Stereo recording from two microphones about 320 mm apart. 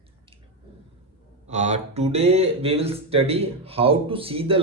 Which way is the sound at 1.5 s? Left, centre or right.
Right.